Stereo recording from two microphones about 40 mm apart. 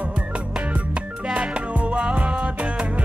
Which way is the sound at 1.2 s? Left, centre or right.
Right.